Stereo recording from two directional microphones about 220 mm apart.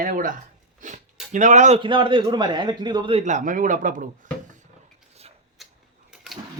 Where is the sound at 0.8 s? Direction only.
35° right (ahead or behind).